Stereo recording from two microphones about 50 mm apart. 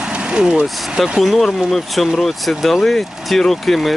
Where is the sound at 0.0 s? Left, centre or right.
Centre.